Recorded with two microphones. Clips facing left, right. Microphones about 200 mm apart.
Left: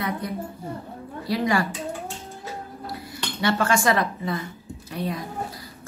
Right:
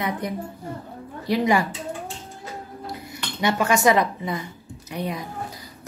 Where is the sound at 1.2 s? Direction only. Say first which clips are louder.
Right 3 dB; 20° right (ahead or behind).